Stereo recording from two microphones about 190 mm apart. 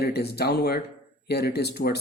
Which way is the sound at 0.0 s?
60° left (ahead or behind).